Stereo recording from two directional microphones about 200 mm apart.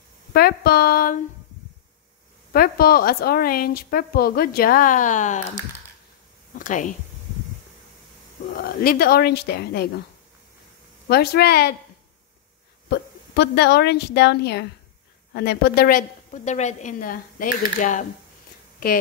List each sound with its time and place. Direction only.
0.3 s a woman's voice: 50° left (ahead or behind)
2.5 s a woman's voice: 50° left (ahead or behind)
6.6 s speech: 40° left (ahead or behind)
8.5 s a woman's voice: 50° left (ahead or behind)
11.1 s a woman's voice: 50° left (ahead or behind)
12.9 s a woman's voice: 55° left (ahead or behind); by 18.0 s 40° left (ahead or behind)